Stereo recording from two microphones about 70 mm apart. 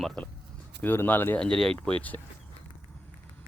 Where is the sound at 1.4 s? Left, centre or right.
Centre.